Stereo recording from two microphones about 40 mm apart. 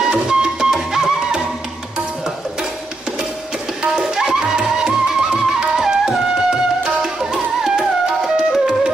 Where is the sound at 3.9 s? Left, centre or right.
Centre.